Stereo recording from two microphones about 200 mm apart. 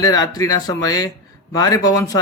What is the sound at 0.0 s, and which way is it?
A man's voice, 20° left (ahead or behind).